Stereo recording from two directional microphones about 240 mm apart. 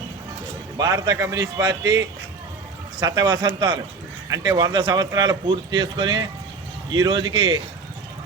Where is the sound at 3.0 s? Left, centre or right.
Centre.